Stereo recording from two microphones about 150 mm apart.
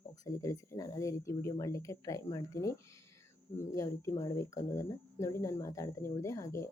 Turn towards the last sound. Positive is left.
turn(degrees=20)  # may be behind; listen again after turning